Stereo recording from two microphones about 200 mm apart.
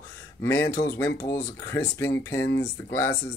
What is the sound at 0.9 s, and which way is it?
Speech, 15° left (ahead or behind).